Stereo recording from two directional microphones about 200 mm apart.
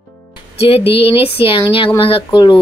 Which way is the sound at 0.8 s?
55° left (ahead or behind).